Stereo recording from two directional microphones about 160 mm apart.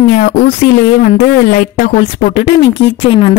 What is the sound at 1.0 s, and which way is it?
A woman's voice, 65° left (ahead or behind).